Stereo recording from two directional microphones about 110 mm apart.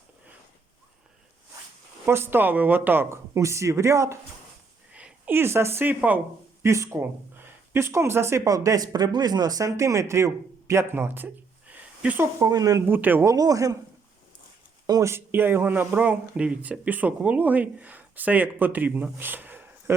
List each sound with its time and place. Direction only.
2.0 s speech: 20° right (ahead or behind)
4.9 s speech: 10° right (ahead or behind)
6.6 s speech: 25° right (ahead or behind)
11.7 s a sound: 15° right (ahead or behind)
12.4 s a man's voice: 35° right (ahead or behind)
12.9 s speech: 15° right (ahead or behind)
13.3 s a man's voice: 35° right (ahead or behind)
14.8 s speech: 30° right (ahead or behind)